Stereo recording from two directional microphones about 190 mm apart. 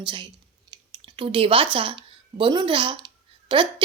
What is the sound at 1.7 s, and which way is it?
A woman's voice, 25° right (ahead or behind).